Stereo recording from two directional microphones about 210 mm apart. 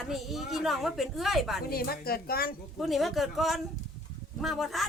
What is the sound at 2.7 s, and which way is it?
A woman's voice, centre (ahead or behind).